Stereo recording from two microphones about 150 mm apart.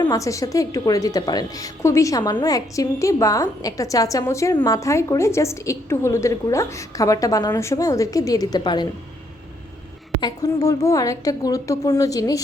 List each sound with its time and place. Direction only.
0.0 s a woman's voice: 20° left (ahead or behind)
10.2 s a woman's voice: 25° left (ahead or behind)